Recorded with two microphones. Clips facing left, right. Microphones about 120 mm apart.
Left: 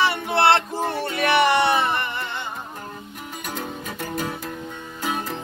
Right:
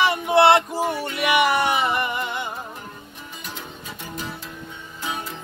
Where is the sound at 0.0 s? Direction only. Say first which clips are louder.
Right 3 dB; 20° right (ahead or behind).